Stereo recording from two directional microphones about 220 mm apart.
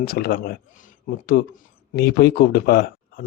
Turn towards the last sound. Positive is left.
turn(degrees=45)  # may be behind; listen again after turning